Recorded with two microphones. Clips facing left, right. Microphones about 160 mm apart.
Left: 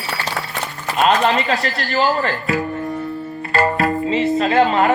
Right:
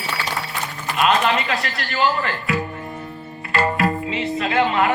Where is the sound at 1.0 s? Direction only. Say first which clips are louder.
Left 3 dB; 35° left (ahead or behind).